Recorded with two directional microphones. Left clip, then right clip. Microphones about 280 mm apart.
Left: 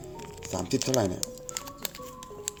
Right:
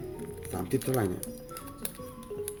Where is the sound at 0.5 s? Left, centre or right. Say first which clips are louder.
Left 3 dB; centre.